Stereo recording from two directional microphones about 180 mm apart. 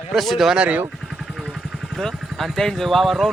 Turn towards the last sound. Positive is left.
turn(degrees=0)  # may be behind; listen again after turning